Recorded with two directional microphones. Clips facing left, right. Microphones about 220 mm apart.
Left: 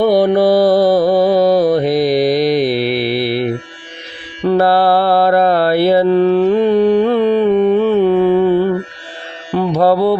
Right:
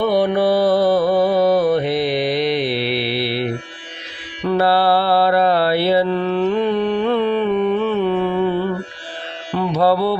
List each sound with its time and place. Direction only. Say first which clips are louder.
0.0 s mantra: left 5 dB; 40° left (ahead or behind)
9.5 s music: left 4 dB; 45° left (ahead or behind)